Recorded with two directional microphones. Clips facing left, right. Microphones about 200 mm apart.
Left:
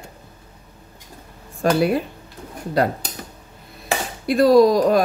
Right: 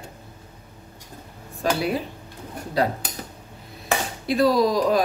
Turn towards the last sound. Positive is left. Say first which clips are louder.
# left 6 dB
turn(degrees=50)  # may be behind; listen again after turning